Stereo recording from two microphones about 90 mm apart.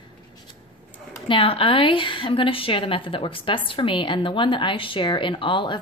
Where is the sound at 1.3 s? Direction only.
90° left.